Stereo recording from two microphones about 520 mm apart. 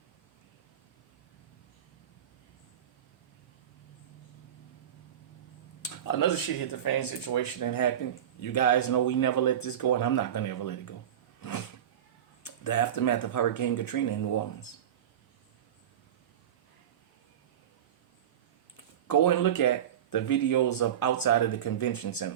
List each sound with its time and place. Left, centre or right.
6.1 s speech: left
12.4 s speech: left
19.0 s speech: left